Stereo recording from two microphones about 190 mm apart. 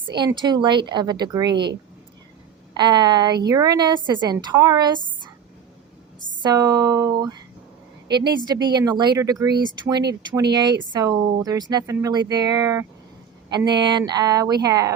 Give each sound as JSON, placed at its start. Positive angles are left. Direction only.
{"t": 0.2, "sound": "a woman's voice", "side_deg": -20}
{"t": 1.5, "sound": "speech", "side_deg": -60}
{"t": 2.7, "sound": "a woman's voice", "side_deg": -20}
{"t": 6.4, "sound": "a woman's voice", "side_deg": -20}